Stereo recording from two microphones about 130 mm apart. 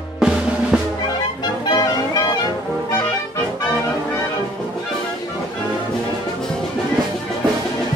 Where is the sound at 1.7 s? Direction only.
35° left (ahead or behind).